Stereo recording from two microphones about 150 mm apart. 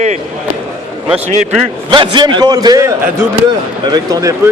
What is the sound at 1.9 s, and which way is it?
A man's voice, 30° right (ahead or behind).